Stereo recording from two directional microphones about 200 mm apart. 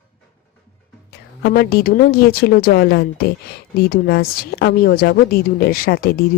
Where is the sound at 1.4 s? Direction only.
50° left (ahead or behind).